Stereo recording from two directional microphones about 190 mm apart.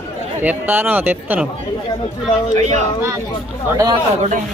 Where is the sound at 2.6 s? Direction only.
35° right (ahead or behind).